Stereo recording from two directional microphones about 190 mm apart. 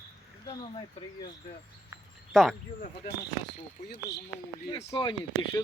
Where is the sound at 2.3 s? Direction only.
Centre (ahead or behind).